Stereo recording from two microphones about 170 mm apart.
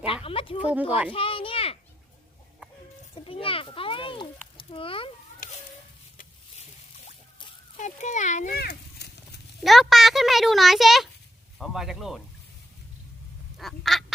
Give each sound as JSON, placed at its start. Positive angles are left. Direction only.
{"t": 0.0, "sound": "a sound", "side_deg": 35}
{"t": 0.7, "sound": "a child's voice", "side_deg": -10}
{"t": 1.1, "sound": "children playing", "side_deg": 30}
{"t": 3.2, "sound": "speech", "side_deg": 30}
{"t": 7.8, "sound": "speech", "side_deg": 45}
{"t": 8.5, "sound": "a sound", "side_deg": 75}
{"t": 9.6, "sound": "a child's voice", "side_deg": 0}
{"t": 13.6, "sound": "a child's voice", "side_deg": 0}